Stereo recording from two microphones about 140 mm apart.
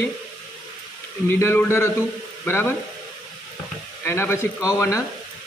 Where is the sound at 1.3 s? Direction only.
15° left (ahead or behind).